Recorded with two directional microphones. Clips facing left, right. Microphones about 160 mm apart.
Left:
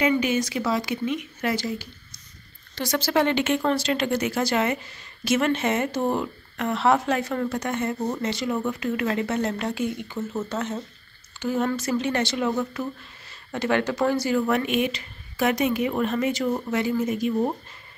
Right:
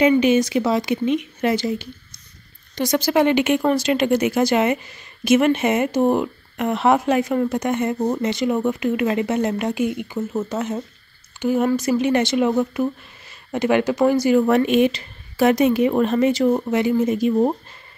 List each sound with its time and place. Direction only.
0.0 s speech: 20° right (ahead or behind)
14.4 s a woman's voice: 35° right (ahead or behind)